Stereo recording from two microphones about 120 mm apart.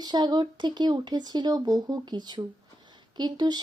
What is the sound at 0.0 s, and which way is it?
Speech, 35° right (ahead or behind).